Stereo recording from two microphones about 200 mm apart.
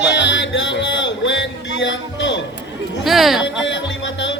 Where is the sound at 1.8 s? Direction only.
70° left (ahead or behind).